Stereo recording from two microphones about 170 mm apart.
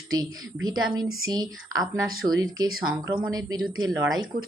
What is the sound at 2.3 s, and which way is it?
Speech, 25° right (ahead or behind).